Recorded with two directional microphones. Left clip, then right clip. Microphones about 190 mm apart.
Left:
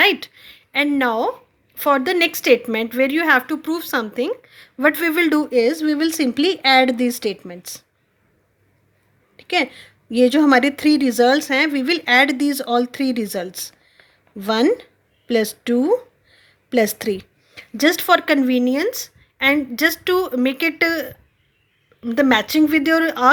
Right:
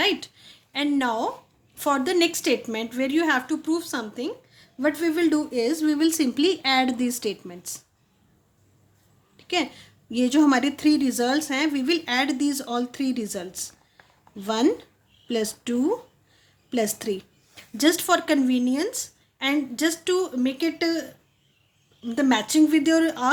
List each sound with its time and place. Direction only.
0.0 s a sound: 35° left (ahead or behind)
1.7 s a woman's voice: 30° left (ahead or behind)
9.4 s a woman's voice: 35° left (ahead or behind)